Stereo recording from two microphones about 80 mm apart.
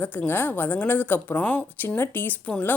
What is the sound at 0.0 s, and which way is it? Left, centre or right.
Speech, left.